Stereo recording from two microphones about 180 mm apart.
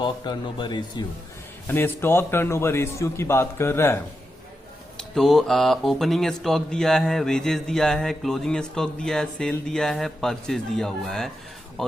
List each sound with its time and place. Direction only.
0.0 s speech: 25° left (ahead or behind)
1.6 s a man's voice: 10° left (ahead or behind)
4.9 s speech: centre (ahead or behind)